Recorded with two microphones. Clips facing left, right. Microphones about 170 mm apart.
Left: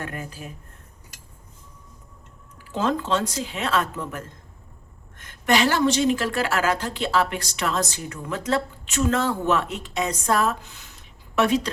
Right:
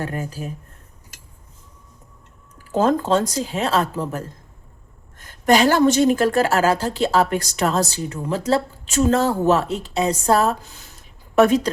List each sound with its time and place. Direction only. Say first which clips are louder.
0.0 s a woman's voice: right 6 dB; 35° right (ahead or behind)
2.7 s a woman's voice: right 6 dB; 40° right (ahead or behind)